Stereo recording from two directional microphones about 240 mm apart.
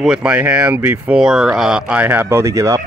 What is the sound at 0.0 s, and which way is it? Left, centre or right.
Speech, centre.